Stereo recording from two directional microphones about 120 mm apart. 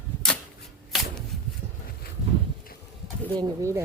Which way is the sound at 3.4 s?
25° right (ahead or behind).